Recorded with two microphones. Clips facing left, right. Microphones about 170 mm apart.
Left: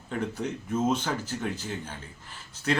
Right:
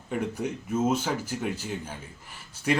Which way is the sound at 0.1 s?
10° right (ahead or behind).